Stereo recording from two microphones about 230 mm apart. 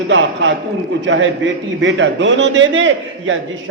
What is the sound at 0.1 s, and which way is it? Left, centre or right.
A man's voice, right.